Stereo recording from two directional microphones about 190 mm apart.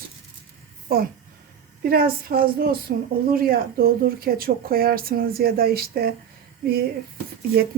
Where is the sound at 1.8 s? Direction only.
50° right (ahead or behind).